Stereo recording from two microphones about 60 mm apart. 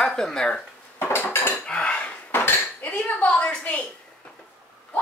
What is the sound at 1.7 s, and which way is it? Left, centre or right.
Dishes, centre.